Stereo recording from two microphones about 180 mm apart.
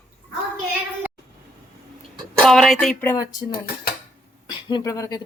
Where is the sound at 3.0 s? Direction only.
15° left (ahead or behind).